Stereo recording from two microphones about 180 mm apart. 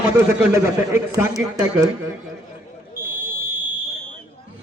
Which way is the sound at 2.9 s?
50° right (ahead or behind).